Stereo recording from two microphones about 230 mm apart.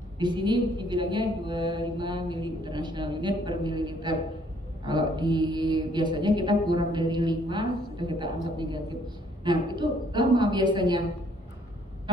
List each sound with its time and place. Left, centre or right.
0.2 s a woman's voice: centre